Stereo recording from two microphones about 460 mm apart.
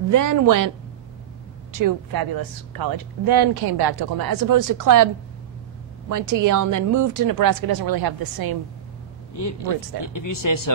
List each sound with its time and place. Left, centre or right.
0.1 s a woman's voice: right
1.7 s speech: right
9.9 s speech: left